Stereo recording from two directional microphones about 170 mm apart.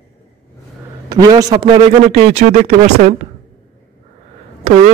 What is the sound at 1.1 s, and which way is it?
Speech, 25° right (ahead or behind).